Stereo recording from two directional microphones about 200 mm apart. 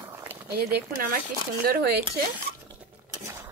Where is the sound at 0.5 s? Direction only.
45° right (ahead or behind).